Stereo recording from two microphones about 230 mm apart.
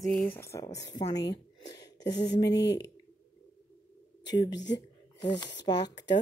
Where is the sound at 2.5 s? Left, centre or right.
Left.